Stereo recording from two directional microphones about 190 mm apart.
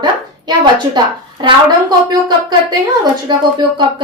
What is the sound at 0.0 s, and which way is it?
A woman's voice, 25° right (ahead or behind).